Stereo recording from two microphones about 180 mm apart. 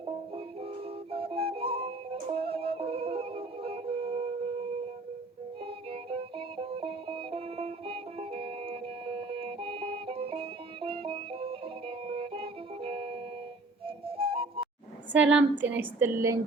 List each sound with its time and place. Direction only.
1.1 s music: 30° right (ahead or behind)
5.9 s music: 30° right (ahead or behind)
15.1 s a woman's voice: 5° right (ahead or behind)